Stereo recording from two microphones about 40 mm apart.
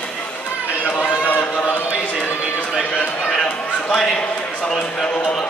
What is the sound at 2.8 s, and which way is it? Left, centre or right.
Speech, left.